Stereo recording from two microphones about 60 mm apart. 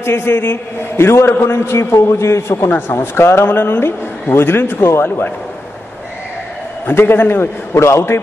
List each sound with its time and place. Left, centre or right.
0.0 s a man's voice: left
2.9 s a man's voice: left
6.9 s a man's voice: left